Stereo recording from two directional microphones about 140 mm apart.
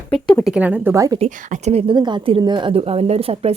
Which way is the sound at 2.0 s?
35° right (ahead or behind).